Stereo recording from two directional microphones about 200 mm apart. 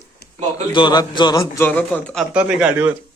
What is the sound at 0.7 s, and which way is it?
Speech, 25° left (ahead or behind).